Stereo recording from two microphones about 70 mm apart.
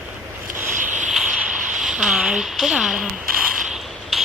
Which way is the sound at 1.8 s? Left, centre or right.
Centre.